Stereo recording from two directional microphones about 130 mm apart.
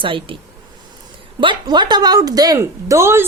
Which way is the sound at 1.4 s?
35° right (ahead or behind).